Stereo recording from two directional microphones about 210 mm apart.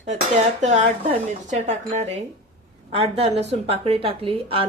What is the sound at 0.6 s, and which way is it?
Speech, 35° right (ahead or behind).